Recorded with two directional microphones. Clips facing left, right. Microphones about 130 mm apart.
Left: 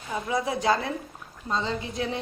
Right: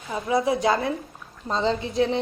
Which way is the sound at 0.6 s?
25° right (ahead or behind).